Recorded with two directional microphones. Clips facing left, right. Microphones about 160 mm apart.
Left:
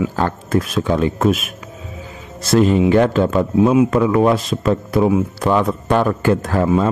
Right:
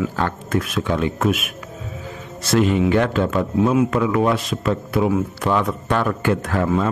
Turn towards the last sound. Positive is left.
turn(degrees=35)  # may be behind; listen again after turning